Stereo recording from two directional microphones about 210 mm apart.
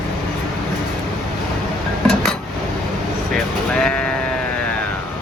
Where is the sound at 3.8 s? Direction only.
5° left (ahead or behind).